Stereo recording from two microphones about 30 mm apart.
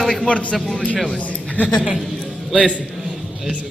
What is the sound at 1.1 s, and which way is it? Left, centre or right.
Speech, left.